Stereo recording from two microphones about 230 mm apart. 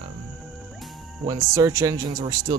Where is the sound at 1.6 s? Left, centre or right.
Centre.